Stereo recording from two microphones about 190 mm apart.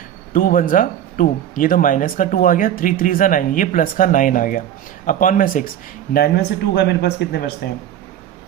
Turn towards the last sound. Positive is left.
turn(degrees=60)  # may be behind; listen again after turning